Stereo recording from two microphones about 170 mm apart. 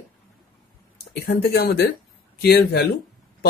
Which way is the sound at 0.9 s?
70° left (ahead or behind).